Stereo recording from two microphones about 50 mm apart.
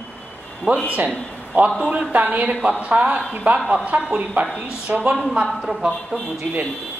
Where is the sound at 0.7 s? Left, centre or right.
Right.